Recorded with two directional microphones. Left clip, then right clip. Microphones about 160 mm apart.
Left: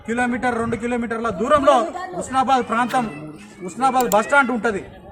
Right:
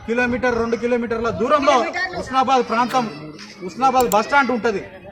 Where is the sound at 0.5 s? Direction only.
25° left (ahead or behind).